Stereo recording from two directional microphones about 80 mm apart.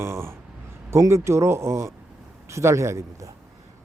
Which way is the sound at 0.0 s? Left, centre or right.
Right.